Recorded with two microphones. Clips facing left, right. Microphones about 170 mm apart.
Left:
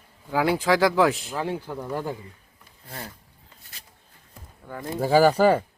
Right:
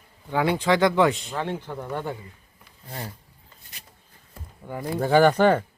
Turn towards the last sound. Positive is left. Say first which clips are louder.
# even
turn(degrees=10)  # may be behind; listen again after turning